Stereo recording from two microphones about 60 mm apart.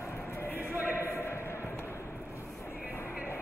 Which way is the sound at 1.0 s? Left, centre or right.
Left.